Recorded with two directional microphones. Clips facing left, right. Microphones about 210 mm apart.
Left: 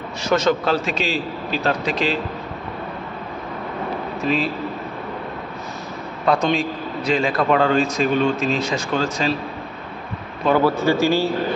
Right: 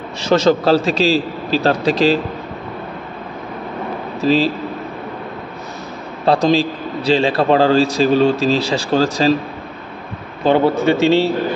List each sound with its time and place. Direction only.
0.2 s a man's voice: 30° right (ahead or behind)
4.2 s a man's voice: 30° right (ahead or behind)
6.2 s a man's voice: 30° right (ahead or behind)
10.4 s speech: 25° right (ahead or behind)